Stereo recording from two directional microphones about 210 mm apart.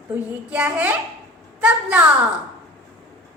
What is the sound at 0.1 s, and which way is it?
Child singing, 5° right (ahead or behind).